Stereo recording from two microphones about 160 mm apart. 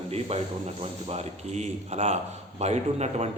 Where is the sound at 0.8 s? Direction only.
40° right (ahead or behind).